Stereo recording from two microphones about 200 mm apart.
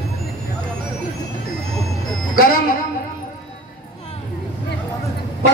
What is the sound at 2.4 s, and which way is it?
Speech, 45° left (ahead or behind).